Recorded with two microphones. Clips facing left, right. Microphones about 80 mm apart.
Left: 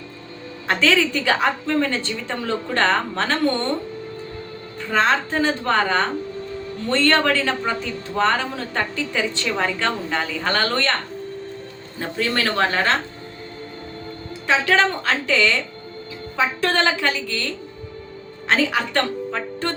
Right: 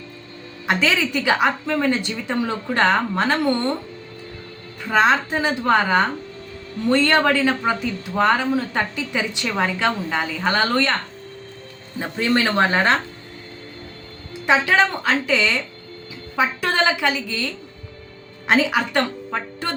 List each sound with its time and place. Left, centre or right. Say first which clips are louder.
0.7 s speech: left 1 dB; centre
4.8 s speech: right 2 dB; centre
11.9 s speech: right 3 dB; centre
14.4 s speech: right 1 dB; centre